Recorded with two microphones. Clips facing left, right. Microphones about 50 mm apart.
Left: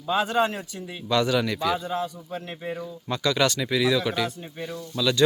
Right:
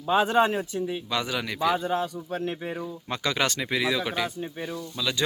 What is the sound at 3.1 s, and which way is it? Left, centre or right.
Speech, right.